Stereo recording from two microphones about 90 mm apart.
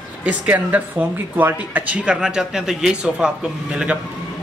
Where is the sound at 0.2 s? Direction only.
15° right (ahead or behind).